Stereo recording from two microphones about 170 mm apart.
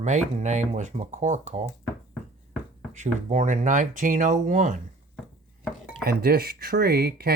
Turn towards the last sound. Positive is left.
turn(degrees=-65)  # may be behind; listen again after turning